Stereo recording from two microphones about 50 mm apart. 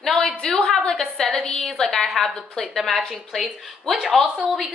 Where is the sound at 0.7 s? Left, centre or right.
Centre.